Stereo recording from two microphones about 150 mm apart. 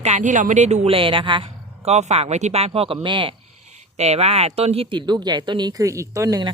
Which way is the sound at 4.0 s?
45° right (ahead or behind).